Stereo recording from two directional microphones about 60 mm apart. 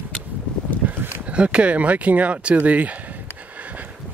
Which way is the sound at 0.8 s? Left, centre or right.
Right.